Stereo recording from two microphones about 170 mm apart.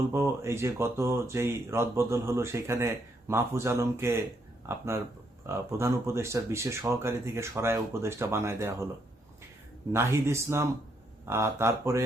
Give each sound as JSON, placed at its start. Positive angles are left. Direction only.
{"t": 0.1, "sound": "speech", "side_deg": -15}
{"t": 9.9, "sound": "speech", "side_deg": -15}